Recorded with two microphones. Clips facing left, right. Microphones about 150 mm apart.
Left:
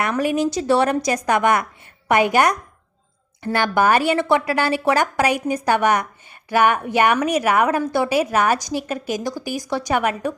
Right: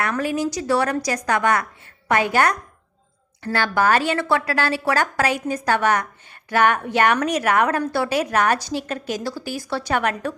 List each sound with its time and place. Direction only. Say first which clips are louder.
0.0 s a woman's voice: left 3 dB; 20° left (ahead or behind)